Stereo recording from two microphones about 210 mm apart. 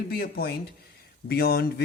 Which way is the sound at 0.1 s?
45° left (ahead or behind).